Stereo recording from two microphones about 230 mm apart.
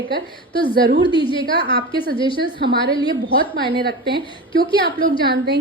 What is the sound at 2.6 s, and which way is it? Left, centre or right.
A woman's voice, right.